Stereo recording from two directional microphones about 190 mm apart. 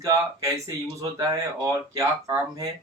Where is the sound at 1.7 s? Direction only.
15° right (ahead or behind).